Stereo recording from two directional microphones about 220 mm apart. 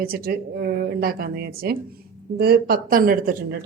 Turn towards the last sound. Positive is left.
turn(degrees=-40)  # may be behind; listen again after turning